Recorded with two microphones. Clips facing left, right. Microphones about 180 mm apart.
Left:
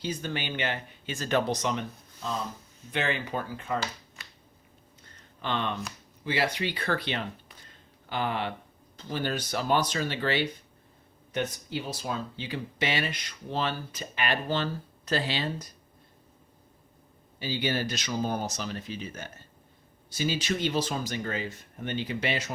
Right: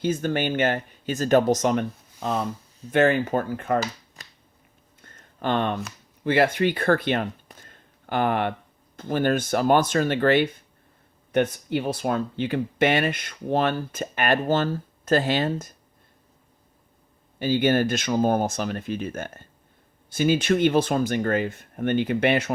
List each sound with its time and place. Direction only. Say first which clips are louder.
0.0 s speech: right 9 dB; 50° right (ahead or behind)
2.9 s speech: right 11 dB; 45° right (ahead or behind)
4.2 s a sound: right 1 dB; 40° right (ahead or behind)
6.2 s speech: right 9 dB; 55° right (ahead or behind)
17.4 s speech: right 9 dB; 50° right (ahead or behind)